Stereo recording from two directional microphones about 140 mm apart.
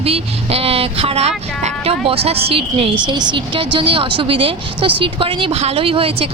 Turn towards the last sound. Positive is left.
turn(degrees=-45)  # may be behind; listen again after turning